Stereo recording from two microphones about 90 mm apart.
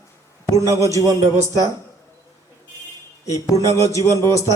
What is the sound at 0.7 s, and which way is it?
Speech, 35° left (ahead or behind).